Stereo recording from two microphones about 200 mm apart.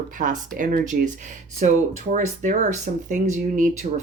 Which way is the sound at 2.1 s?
35° right (ahead or behind).